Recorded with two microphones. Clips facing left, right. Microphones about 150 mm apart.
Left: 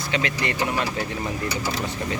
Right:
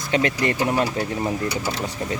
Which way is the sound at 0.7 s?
30° right (ahead or behind).